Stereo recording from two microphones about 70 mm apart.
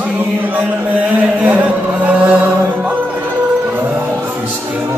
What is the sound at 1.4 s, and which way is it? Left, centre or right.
Music, right.